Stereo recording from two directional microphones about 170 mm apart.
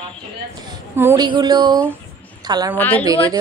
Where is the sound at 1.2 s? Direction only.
25° right (ahead or behind).